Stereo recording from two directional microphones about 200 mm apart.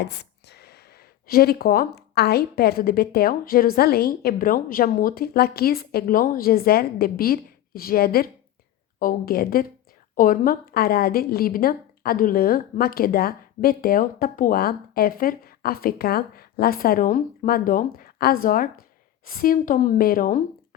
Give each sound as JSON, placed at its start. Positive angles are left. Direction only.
{"t": 0.0, "sound": "a woman's voice", "side_deg": 55}